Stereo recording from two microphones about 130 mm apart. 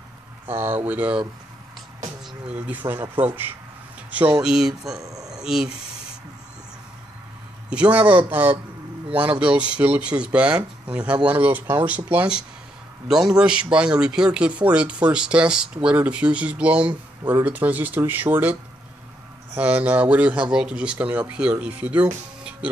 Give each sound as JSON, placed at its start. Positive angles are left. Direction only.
{"t": 0.5, "sound": "speech", "side_deg": -20}
{"t": 2.4, "sound": "speech", "side_deg": -10}
{"t": 5.0, "sound": "a sound", "side_deg": -25}
{"t": 5.4, "sound": "speech", "side_deg": -5}
{"t": 7.7, "sound": "speech", "side_deg": -10}